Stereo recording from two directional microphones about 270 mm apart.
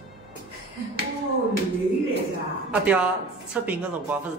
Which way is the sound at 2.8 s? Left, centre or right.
Centre.